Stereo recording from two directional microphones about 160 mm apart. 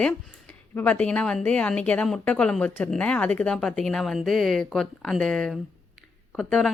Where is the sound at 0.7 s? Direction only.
10° left (ahead or behind).